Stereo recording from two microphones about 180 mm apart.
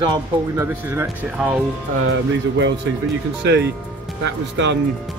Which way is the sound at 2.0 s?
85° right.